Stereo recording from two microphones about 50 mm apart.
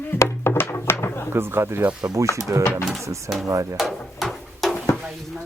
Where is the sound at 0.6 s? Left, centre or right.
Left.